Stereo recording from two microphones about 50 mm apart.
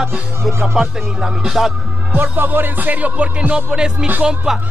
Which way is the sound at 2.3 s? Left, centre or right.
Right.